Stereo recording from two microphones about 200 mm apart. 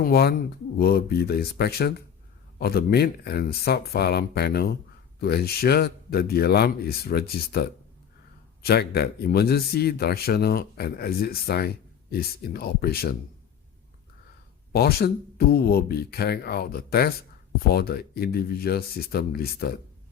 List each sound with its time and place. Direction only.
0.0 s a man's voice: 55° left (ahead or behind)
14.7 s a man's voice: 50° left (ahead or behind)